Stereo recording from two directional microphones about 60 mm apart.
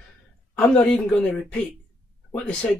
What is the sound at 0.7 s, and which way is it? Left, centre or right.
Speech, left.